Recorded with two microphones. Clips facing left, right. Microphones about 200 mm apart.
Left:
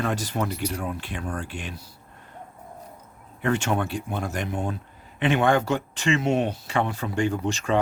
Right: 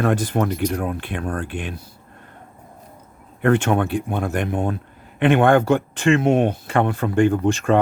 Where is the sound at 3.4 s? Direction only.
55° right (ahead or behind).